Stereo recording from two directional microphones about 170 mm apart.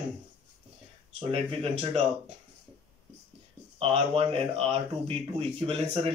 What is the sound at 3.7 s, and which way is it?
Speech, 35° right (ahead or behind).